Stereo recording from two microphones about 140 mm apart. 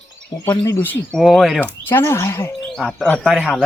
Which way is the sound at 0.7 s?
15° left (ahead or behind).